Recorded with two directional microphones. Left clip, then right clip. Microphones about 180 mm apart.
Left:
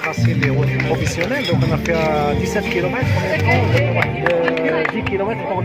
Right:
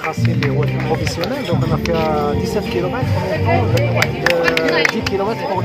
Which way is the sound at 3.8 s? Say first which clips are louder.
Right 1 dB; 25° left (ahead or behind).